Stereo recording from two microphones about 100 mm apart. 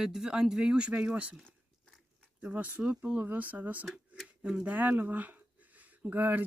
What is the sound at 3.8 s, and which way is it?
Speech, centre (ahead or behind).